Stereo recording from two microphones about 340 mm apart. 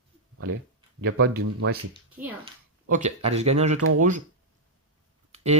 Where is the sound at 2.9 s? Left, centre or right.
Centre.